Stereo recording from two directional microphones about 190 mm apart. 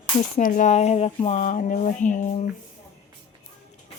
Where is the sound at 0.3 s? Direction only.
40° left (ahead or behind).